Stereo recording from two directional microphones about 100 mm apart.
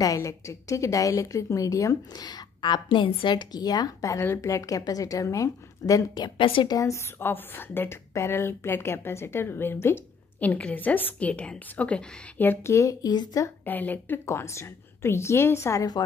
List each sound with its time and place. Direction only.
0.0 s a woman's voice: 35° left (ahead or behind)
6.3 s a woman's voice: 60° left (ahead or behind)
6.7 s a woman's voice: 30° left (ahead or behind)
12.7 s a woman's voice: 35° left (ahead or behind)
13.7 s a woman's voice: 20° left (ahead or behind)
14.2 s a woman's voice: 30° left (ahead or behind)